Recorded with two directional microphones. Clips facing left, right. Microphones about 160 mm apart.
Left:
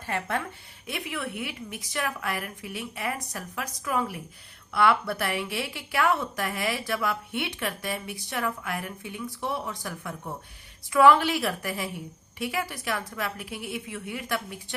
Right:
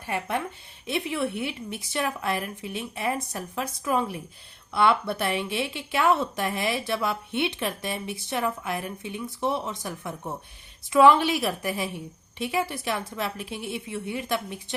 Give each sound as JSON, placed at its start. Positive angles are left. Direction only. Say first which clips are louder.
{"t": 0.0, "sound": "a woman's voice", "louder": "right 1 dB", "side_deg": -15}